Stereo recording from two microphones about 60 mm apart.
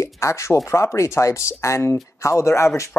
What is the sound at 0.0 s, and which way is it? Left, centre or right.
Speech, left.